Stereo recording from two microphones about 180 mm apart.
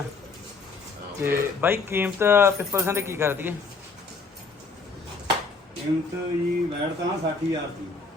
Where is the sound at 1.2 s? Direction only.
15° right (ahead or behind).